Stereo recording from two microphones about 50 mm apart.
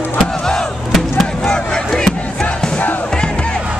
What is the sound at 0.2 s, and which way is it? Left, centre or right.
Music, centre.